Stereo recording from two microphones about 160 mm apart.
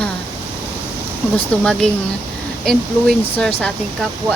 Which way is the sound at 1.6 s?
5° left (ahead or behind).